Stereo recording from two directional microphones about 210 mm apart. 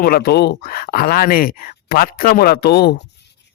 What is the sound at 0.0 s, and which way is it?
Speech, 45° left (ahead or behind).